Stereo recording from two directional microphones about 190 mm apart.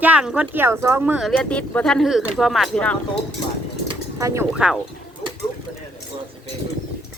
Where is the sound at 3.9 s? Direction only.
15° right (ahead or behind).